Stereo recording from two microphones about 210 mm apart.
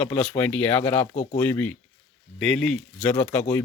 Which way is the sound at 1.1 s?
35° left (ahead or behind).